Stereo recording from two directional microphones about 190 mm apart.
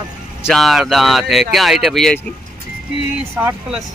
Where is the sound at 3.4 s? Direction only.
15° right (ahead or behind).